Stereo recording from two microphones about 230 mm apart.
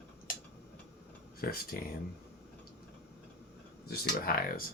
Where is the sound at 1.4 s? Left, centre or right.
Left.